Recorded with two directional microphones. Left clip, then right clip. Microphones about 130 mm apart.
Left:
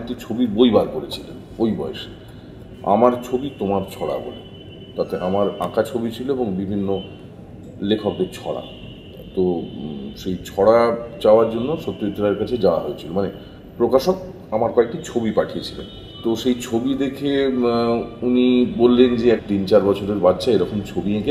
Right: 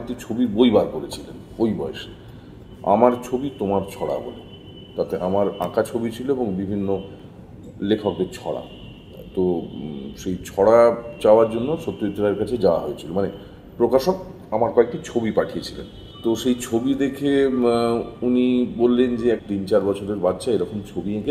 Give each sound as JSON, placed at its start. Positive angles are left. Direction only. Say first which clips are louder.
{"t": 0.0, "sound": "a man's voice", "louder": "left 1 dB", "side_deg": -30}
{"t": 10.2, "sound": "a man's voice", "louder": "left 2 dB", "side_deg": -35}